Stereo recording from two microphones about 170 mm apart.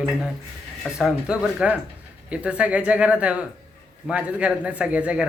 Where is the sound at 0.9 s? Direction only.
5° right (ahead or behind).